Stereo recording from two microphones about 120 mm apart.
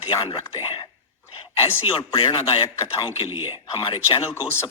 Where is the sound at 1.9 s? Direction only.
45° left (ahead or behind).